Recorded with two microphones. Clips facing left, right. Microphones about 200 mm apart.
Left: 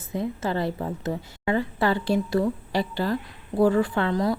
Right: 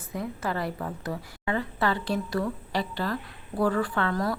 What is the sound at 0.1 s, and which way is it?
A woman's voice, 25° left (ahead or behind).